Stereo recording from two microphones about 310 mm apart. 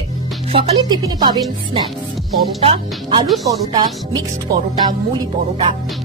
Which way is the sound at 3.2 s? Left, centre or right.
Centre.